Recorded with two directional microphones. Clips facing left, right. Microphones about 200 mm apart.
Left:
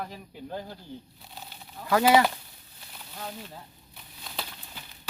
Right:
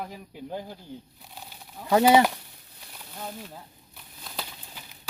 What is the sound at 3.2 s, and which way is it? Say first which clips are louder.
Speech: right 1 dB; 5° right (ahead or behind).